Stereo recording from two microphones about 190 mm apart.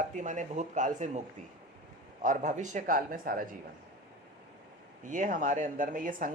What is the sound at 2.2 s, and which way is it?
Speech, 40° right (ahead or behind).